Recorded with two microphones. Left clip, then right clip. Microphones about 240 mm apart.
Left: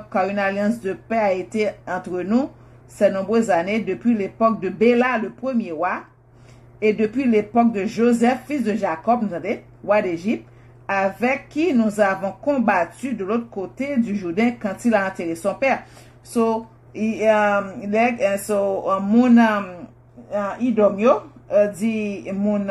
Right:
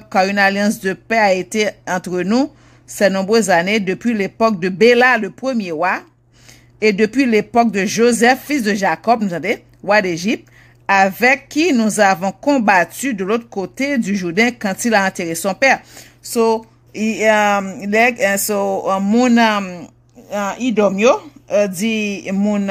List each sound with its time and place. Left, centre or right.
0.1 s a woman's voice: right